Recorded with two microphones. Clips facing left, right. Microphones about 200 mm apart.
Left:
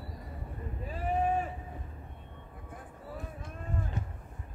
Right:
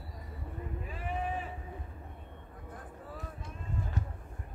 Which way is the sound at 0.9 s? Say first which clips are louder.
Left 8 dB; 40° left (ahead or behind).